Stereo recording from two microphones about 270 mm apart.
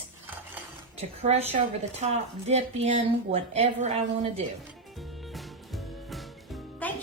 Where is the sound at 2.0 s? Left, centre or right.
Right.